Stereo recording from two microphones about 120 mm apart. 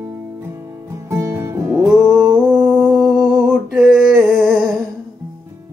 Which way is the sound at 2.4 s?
10° right (ahead or behind).